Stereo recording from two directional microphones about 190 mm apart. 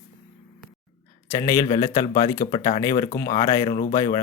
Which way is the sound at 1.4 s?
15° left (ahead or behind).